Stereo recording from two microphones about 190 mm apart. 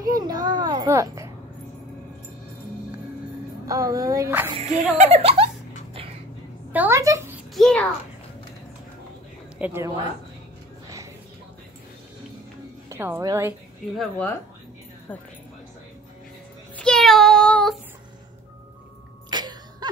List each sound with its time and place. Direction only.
0.1 s children playing: 20° right (ahead or behind)
3.6 s speech: 20° right (ahead or behind)
4.6 s speech: 40° right (ahead or behind)
6.7 s a sound: 10° right (ahead or behind)
7.5 s a child's voice: 5° left (ahead or behind)
9.6 s speech: 10° right (ahead or behind)
12.9 s speech: 15° right (ahead or behind)
13.9 s speech: 10° left (ahead or behind)
16.7 s child singing: 5° left (ahead or behind)
19.3 s a sound: 20° right (ahead or behind)